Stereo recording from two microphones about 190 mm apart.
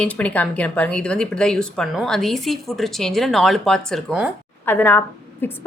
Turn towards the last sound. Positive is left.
turn(degrees=10)  # may be behind; listen again after turning